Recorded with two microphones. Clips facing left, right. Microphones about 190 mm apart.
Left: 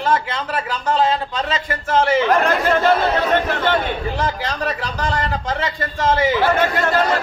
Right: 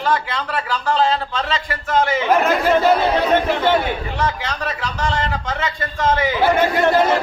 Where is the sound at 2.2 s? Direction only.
5° right (ahead or behind).